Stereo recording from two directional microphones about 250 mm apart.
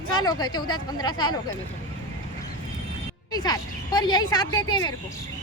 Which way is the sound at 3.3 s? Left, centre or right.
Centre.